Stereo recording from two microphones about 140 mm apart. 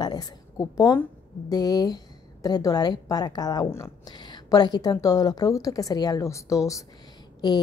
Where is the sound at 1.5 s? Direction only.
30° left (ahead or behind).